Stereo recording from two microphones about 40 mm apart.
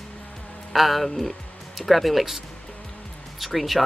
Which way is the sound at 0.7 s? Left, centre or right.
Centre.